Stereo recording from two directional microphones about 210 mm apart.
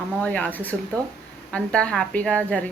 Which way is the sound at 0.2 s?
5° left (ahead or behind).